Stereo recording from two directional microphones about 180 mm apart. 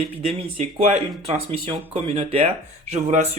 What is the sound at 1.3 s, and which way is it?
Speech, 30° right (ahead or behind).